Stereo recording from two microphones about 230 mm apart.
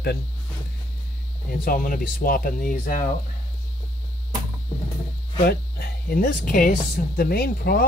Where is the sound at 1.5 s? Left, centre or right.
Left.